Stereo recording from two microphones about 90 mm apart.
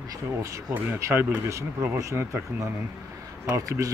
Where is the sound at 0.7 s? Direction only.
25° right (ahead or behind).